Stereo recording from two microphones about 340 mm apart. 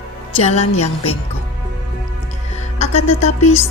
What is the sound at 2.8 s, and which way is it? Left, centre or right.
Music, centre.